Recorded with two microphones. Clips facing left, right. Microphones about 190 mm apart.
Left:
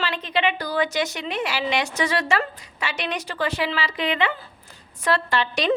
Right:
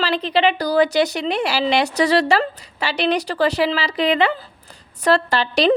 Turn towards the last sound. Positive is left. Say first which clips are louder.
# right 6 dB
turn(degrees=-35)  # may be behind; listen again after turning